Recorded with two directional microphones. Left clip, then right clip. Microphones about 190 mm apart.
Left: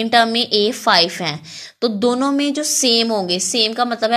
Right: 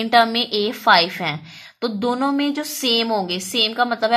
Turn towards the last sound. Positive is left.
turn(degrees=20)  # may be behind; listen again after turning